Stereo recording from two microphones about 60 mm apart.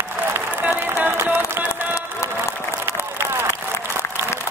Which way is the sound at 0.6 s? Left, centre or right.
Right.